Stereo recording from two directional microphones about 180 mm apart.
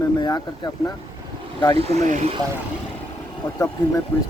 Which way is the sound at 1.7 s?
35° right (ahead or behind).